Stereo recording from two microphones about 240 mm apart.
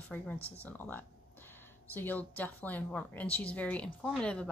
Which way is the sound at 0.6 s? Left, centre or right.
Centre.